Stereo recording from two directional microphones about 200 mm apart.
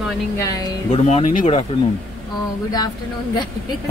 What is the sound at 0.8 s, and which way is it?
Speech, 30° left (ahead or behind).